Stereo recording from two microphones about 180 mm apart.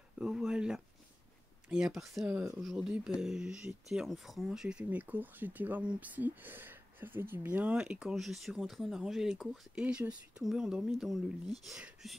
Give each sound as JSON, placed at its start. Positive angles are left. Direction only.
{"t": 0.2, "sound": "speech", "side_deg": -5}